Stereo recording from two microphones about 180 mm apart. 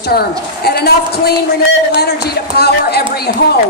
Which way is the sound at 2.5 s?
65° left (ahead or behind).